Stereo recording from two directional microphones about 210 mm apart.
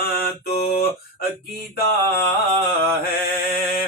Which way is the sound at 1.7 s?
45° left (ahead or behind).